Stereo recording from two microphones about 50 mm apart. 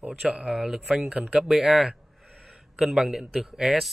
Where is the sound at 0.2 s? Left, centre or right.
Centre.